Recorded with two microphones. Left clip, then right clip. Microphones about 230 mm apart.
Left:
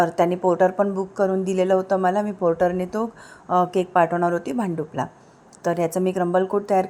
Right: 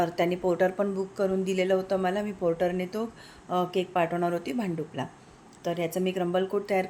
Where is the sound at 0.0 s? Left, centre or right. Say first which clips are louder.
Left 7 dB; centre.